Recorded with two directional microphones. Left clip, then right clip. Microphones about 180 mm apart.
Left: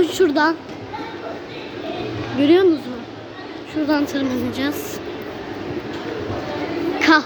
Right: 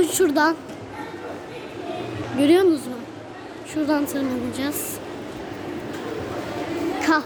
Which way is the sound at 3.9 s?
5° right (ahead or behind).